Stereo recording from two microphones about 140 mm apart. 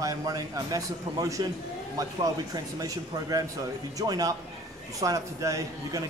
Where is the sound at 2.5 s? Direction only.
25° right (ahead or behind).